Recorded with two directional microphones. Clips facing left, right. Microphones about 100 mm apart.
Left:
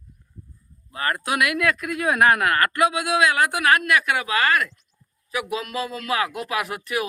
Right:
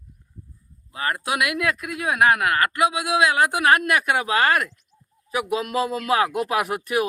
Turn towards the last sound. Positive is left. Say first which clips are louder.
# right 3 dB
turn(degrees=-45)  # may be behind; listen again after turning